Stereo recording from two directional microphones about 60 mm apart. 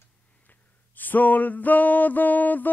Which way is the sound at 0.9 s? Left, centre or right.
Left.